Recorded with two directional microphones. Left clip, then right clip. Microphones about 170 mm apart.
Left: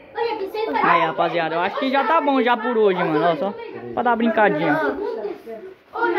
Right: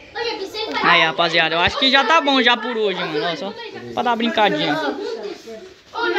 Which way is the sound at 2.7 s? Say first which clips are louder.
Left 3 dB; 35° left (ahead or behind).